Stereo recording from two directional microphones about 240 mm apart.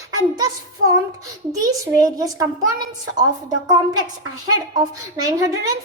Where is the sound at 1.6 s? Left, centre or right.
Centre.